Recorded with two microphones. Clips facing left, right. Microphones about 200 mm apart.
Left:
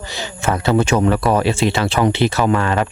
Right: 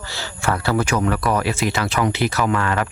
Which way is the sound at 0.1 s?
20° left (ahead or behind).